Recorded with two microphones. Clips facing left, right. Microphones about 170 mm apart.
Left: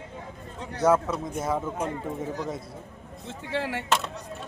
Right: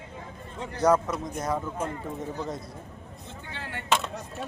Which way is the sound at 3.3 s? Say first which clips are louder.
Left 10 dB; 90° left.